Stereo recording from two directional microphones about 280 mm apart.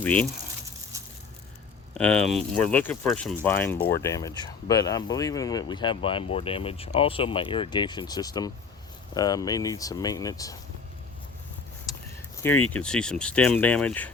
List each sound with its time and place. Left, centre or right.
0.0 s speech: centre
0.9 s coin: centre
1.9 s speech: centre
12.7 s speech: centre